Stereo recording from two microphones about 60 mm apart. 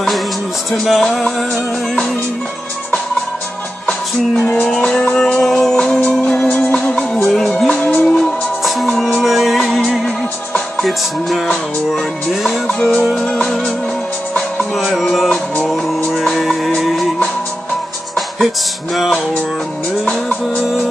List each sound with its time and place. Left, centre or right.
0.7 s music: centre
1.0 s music: centre
4.6 s music: centre
7.2 s music: centre
7.8 s music: left
8.2 s music: centre
12.4 s music: centre
14.9 s music: centre
18.9 s music: centre